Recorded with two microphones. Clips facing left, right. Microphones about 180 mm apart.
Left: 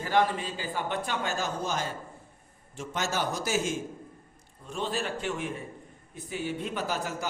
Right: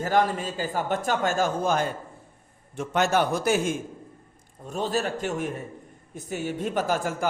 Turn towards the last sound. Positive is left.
turn(degrees=-50)  # may be behind; listen again after turning